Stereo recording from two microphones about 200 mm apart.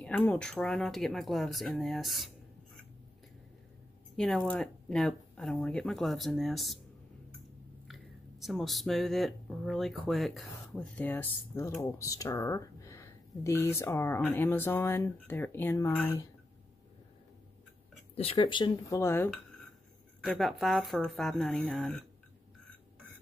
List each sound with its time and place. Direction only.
0.0 s speech: 5° left (ahead or behind)
4.2 s speech: centre (ahead or behind)
7.9 s speech: centre (ahead or behind)
18.1 s speech: 30° left (ahead or behind); by 19.3 s 10° left (ahead or behind)
20.2 s speech: centre (ahead or behind)